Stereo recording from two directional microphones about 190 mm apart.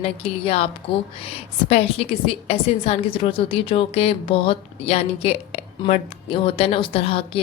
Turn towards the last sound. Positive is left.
turn(degrees=30)  # may be behind; listen again after turning